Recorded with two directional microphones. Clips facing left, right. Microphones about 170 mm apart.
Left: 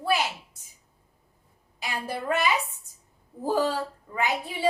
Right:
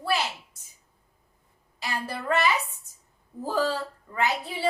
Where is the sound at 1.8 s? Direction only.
15° left (ahead or behind).